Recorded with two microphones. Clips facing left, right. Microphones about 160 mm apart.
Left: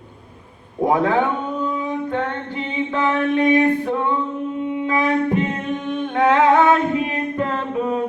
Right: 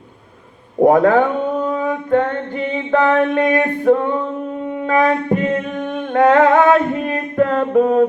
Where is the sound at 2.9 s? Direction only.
50° right (ahead or behind).